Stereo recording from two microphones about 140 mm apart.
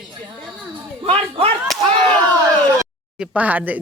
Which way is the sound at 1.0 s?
45° right (ahead or behind).